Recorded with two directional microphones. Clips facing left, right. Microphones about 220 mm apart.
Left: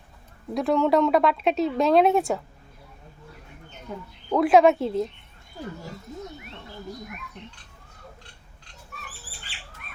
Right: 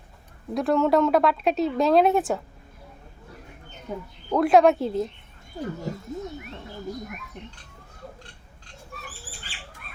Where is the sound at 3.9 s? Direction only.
15° right (ahead or behind).